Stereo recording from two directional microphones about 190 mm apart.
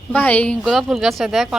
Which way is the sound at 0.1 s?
10° left (ahead or behind).